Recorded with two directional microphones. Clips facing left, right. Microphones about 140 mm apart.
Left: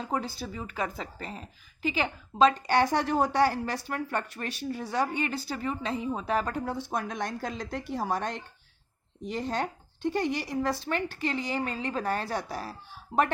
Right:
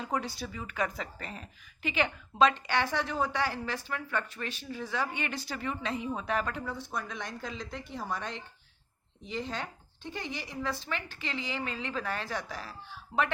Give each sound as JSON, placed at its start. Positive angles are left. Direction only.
{"t": 0.0, "sound": "a woman's voice", "side_deg": 30}
{"t": 6.7, "sound": "a woman's voice", "side_deg": 60}